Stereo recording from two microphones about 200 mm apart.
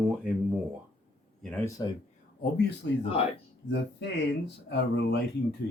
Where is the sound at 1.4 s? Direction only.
5° left (ahead or behind).